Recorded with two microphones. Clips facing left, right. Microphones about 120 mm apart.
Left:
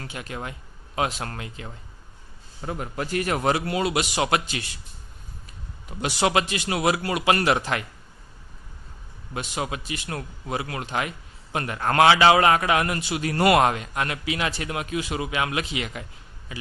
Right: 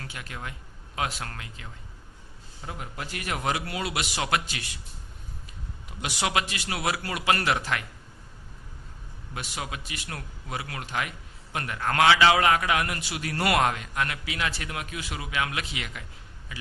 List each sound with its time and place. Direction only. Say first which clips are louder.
0.0 s a man's voice: left 5 dB; 25° left (ahead or behind)
2.6 s a man's voice: left 7 dB; 50° left (ahead or behind); by 4.8 s 25° left (ahead or behind)
6.0 s a man's voice: left 5 dB; 35° left (ahead or behind)
9.3 s a man's voice: left 6 dB; 25° left (ahead or behind)